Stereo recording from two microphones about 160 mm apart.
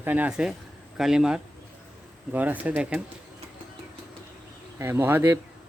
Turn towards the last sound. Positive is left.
turn(degrees=-15)  # may be behind; listen again after turning